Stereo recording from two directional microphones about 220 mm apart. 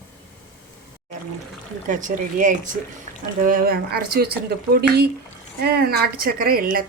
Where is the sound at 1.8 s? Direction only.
35° right (ahead or behind).